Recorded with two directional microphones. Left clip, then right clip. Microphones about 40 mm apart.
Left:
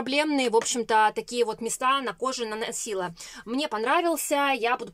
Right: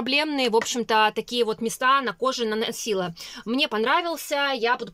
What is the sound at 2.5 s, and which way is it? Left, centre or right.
Speech, centre.